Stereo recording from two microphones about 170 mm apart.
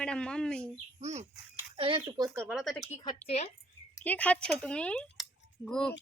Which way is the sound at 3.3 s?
40° left (ahead or behind).